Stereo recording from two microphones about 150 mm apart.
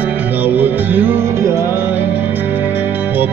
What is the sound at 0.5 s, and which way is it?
Music, 10° right (ahead or behind).